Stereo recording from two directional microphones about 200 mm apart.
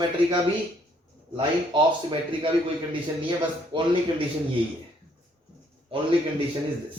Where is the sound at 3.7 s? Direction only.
25° right (ahead or behind).